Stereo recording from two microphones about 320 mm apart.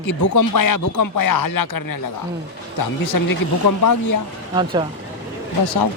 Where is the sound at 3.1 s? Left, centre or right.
Left.